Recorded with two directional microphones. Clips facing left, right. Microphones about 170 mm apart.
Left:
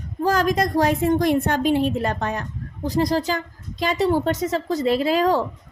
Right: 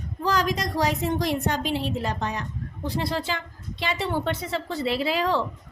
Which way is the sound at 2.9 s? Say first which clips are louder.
Left 7 dB; 40° left (ahead or behind).